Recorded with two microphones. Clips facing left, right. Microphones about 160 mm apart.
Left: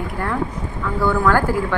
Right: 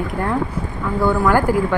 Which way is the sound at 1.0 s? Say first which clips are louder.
Right 1 dB; 15° right (ahead or behind).